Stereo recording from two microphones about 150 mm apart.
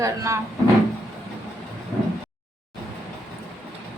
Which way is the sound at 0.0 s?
20° right (ahead or behind).